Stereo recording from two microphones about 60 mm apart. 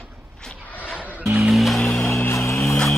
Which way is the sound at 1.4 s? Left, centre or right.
Centre.